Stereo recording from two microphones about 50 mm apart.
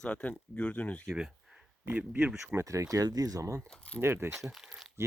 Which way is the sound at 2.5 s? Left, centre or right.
Right.